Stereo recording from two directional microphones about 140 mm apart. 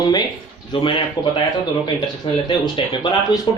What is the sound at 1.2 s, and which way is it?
Speech, 30° left (ahead or behind).